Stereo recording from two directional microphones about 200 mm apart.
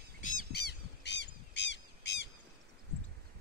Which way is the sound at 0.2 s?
50° left (ahead or behind).